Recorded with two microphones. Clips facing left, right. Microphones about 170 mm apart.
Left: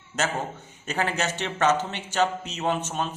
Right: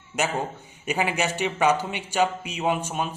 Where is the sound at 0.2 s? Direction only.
15° right (ahead or behind).